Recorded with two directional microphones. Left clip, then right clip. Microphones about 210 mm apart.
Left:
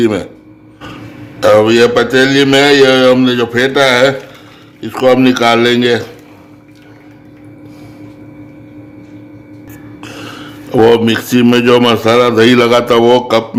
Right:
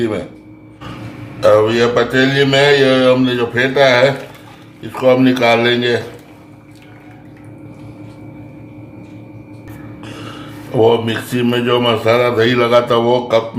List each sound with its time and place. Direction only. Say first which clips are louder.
0.0 s mantra: left 6 dB; 45° left (ahead or behind)
1.4 s mantra: left 4 dB; 50° left (ahead or behind)
10.0 s speech: left 4 dB; 50° left (ahead or behind)